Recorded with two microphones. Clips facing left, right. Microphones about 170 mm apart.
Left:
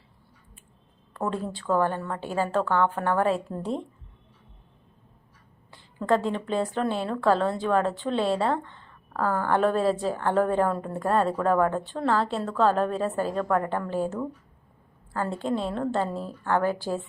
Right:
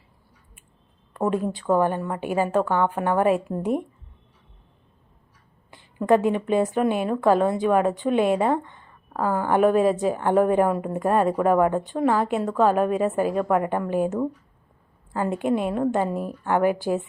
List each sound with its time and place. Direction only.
1.1 s a woman's voice: 15° right (ahead or behind)
5.7 s a woman's voice: 15° right (ahead or behind)